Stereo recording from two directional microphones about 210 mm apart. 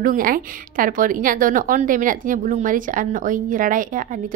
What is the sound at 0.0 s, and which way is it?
A woman's voice, 40° right (ahead or behind).